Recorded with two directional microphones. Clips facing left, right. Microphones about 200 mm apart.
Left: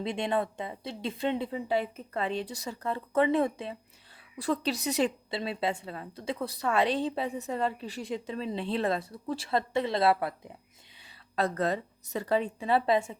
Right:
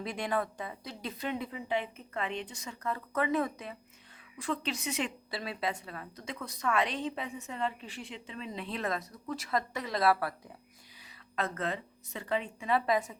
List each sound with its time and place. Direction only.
0.0 s a woman's voice: 25° left (ahead or behind)
11.0 s a woman's voice: 35° left (ahead or behind)